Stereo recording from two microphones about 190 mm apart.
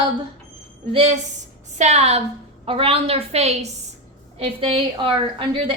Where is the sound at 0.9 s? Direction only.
35° right (ahead or behind).